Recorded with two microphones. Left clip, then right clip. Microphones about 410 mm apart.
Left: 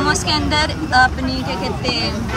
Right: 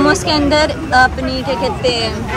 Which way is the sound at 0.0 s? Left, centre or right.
Centre.